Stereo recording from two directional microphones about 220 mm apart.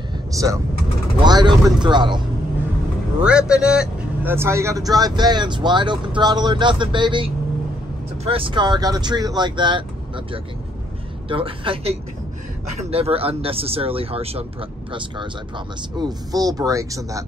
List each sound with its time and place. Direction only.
0.3 s speech: 15° right (ahead or behind)
3.2 s speech: 5° right (ahead or behind)